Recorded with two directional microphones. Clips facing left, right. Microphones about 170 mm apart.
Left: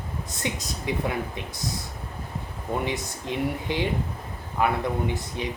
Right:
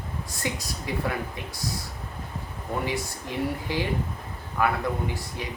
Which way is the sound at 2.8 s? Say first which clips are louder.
Left 1 dB; 20° left (ahead or behind).